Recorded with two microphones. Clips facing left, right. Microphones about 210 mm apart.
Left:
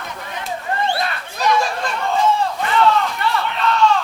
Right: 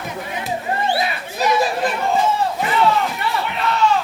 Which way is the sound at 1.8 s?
15° right (ahead or behind).